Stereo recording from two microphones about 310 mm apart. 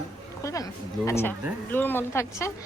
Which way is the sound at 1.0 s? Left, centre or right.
Centre.